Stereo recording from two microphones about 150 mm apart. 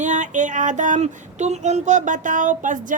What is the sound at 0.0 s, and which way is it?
Child singing, 55° right (ahead or behind).